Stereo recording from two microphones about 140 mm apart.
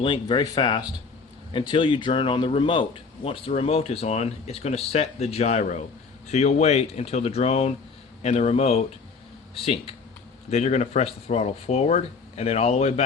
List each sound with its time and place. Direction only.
0.0 s speech: 35° left (ahead or behind)
10.5 s speech: 55° left (ahead or behind)